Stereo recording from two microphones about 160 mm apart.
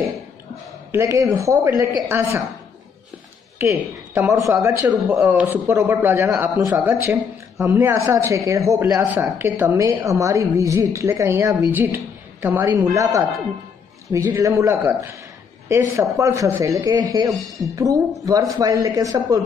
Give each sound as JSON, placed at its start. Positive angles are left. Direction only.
{"t": 0.9, "sound": "a woman's voice", "side_deg": -20}
{"t": 3.5, "sound": "a woman's voice", "side_deg": -15}
{"t": 17.3, "sound": "speech", "side_deg": 0}
{"t": 17.7, "sound": "speech", "side_deg": -20}